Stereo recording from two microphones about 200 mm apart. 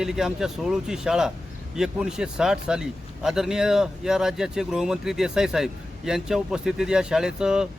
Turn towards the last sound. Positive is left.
turn(degrees=-5)  # may be behind; listen again after turning